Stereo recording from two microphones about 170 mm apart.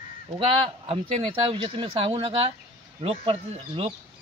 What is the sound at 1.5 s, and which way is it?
Speech, 30° right (ahead or behind).